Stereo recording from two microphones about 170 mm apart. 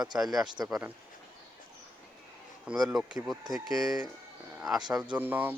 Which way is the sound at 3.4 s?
20° right (ahead or behind).